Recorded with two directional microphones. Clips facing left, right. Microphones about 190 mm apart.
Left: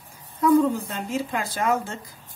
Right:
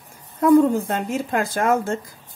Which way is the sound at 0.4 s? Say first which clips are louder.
Right 4 dB; 55° right (ahead or behind).